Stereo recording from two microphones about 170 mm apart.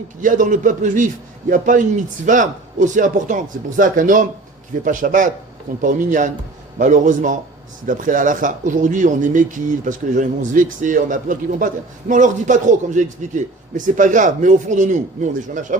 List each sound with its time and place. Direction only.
0.2 s speech: 50° right (ahead or behind)